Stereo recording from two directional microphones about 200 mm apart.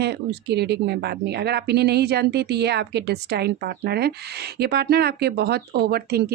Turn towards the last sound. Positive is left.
turn(degrees=-50)  # may be behind; listen again after turning